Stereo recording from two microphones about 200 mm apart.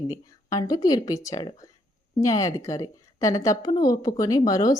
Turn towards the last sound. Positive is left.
turn(degrees=20)  # may be behind; listen again after turning